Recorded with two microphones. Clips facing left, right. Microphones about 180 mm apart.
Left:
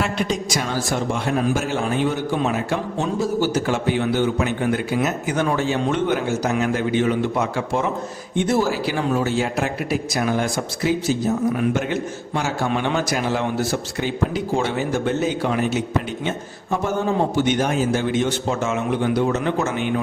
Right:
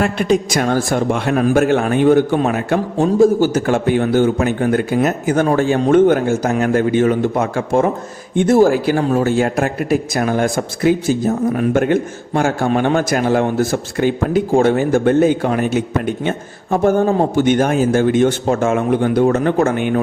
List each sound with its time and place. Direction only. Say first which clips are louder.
0.0 s a man's voice: right 7 dB; 55° right (ahead or behind)